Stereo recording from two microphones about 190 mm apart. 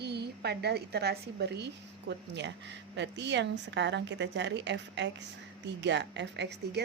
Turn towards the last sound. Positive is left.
turn(degrees=-65)  # may be behind; listen again after turning